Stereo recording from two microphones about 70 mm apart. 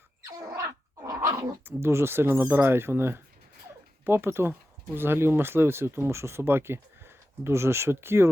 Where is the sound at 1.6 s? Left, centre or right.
Right.